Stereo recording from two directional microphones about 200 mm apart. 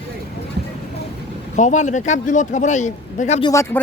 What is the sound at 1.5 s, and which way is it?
Speech, 35° left (ahead or behind).